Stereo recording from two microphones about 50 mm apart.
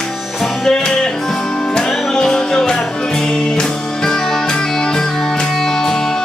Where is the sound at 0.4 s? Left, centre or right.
Centre.